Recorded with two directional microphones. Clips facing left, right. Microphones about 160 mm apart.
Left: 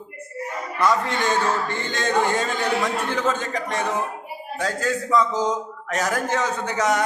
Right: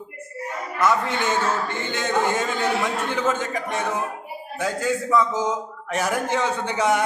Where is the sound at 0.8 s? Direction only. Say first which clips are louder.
Even; 20° right (ahead or behind).